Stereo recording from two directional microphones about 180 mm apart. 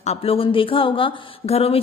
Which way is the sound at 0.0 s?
35° left (ahead or behind).